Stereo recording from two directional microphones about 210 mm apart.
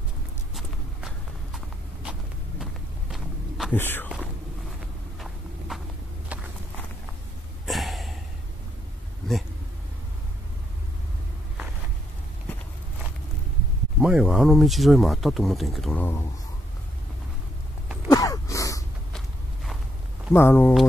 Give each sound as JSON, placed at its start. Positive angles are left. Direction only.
{"t": 0.6, "sound": "walk", "side_deg": 0}
{"t": 2.0, "sound": "vehicle", "side_deg": -5}
{"t": 2.6, "sound": "a sound", "side_deg": 0}
{"t": 3.7, "sound": "speech", "side_deg": 10}
{"t": 5.7, "sound": "walk", "side_deg": 0}
{"t": 7.6, "sound": "a sound", "side_deg": 0}
{"t": 13.9, "sound": "speech", "side_deg": -5}
{"t": 18.1, "sound": "a sound", "side_deg": 15}
{"t": 19.1, "sound": "walk", "side_deg": 0}
{"t": 20.3, "sound": "speech", "side_deg": 10}